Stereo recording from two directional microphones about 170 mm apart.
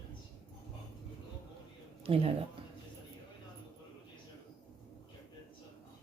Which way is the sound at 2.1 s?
35° right (ahead or behind).